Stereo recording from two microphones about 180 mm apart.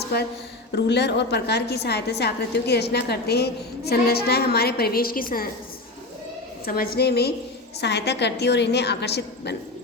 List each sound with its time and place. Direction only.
0.7 s a woman's voice: 70° left (ahead or behind); by 5.5 s 50° left (ahead or behind)
6.7 s a woman's voice: 55° left (ahead or behind)